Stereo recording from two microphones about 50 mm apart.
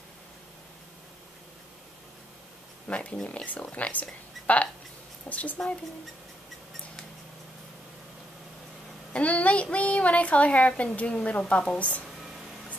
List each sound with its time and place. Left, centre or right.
2.9 s a woman's voice: left
9.1 s a woman's voice: left